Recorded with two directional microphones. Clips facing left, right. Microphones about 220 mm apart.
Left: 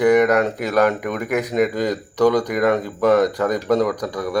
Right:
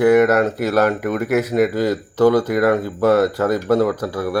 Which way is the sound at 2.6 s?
5° right (ahead or behind).